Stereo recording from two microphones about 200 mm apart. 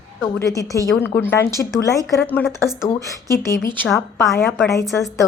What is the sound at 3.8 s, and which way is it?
Speech, centre (ahead or behind).